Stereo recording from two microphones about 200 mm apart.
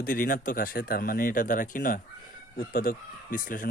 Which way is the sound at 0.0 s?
45° left (ahead or behind).